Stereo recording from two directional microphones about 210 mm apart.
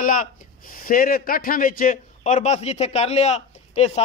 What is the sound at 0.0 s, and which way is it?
Speech, 40° left (ahead or behind).